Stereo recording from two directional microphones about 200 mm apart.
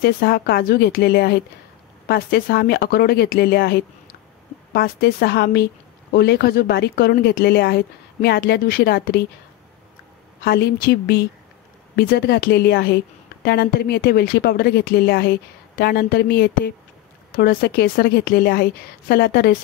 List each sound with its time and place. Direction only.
0.0 s a woman's voice: 55° left (ahead or behind)
10.4 s a woman's voice: 50° left (ahead or behind)